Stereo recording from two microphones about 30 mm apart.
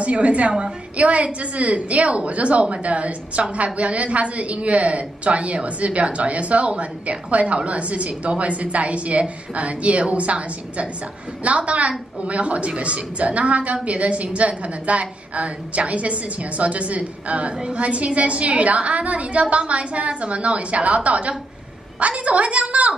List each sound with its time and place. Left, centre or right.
0.0 s a woman's voice: right